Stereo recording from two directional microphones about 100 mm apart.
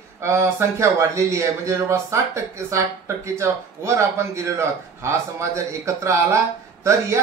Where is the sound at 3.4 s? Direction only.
30° right (ahead or behind).